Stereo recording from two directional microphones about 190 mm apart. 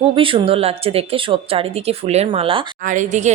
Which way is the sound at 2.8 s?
40° right (ahead or behind).